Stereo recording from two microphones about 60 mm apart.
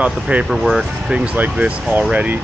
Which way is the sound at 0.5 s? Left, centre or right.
Centre.